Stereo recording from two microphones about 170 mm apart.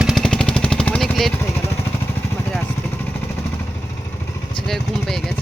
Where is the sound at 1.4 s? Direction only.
15° left (ahead or behind).